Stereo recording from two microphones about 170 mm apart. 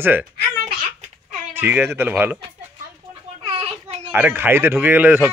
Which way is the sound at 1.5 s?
15° right (ahead or behind).